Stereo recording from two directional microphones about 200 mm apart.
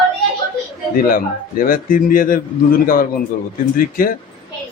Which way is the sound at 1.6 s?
45° left (ahead or behind).